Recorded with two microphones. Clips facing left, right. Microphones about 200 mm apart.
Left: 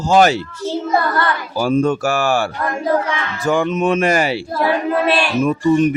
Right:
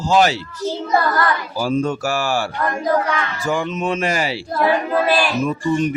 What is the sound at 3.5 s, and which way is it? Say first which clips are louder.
Speech: left 6 dB; 55° left (ahead or behind).